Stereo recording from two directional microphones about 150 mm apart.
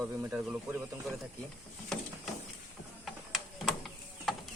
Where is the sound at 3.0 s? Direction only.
Centre (ahead or behind).